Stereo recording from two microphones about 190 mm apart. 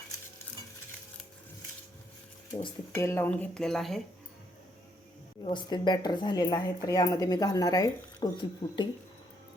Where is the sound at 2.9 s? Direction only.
10° left (ahead or behind).